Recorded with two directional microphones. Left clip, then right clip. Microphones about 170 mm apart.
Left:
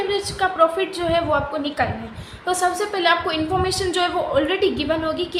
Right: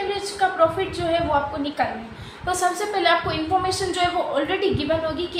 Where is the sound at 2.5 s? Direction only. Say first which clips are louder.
Left 2 dB; 40° left (ahead or behind).